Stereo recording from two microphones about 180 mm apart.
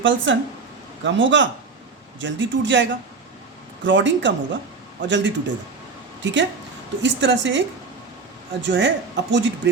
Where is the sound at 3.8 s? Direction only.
90° right.